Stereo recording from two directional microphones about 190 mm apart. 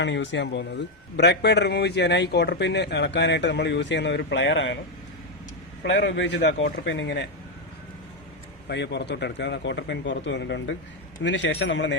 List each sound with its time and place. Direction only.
0.0 s a man's voice: 70° left (ahead or behind)
5.8 s speech: 65° left (ahead or behind)
8.7 s speech: 65° left (ahead or behind)